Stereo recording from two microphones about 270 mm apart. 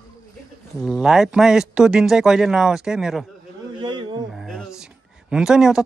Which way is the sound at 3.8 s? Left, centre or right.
Centre.